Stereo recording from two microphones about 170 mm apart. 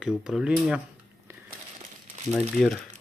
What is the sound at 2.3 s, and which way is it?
Speech, 5° left (ahead or behind).